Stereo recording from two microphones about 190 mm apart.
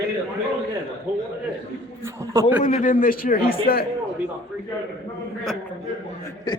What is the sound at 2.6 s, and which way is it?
A man's voice, 45° left (ahead or behind).